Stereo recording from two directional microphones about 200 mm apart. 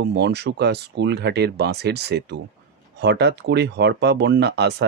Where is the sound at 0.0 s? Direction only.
55° right (ahead or behind).